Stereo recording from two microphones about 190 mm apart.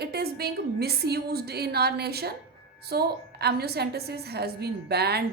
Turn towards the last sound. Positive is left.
turn(degrees=-60)  # may be behind; listen again after turning